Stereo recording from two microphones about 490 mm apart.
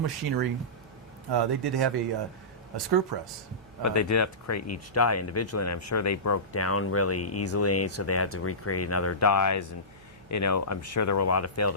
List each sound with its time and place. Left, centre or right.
0.0 s speech: right
3.1 s speech: right
3.8 s speech: left